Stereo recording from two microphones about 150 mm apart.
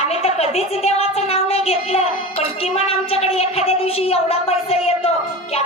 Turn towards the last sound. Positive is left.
turn(degrees=40)  # may be behind; listen again after turning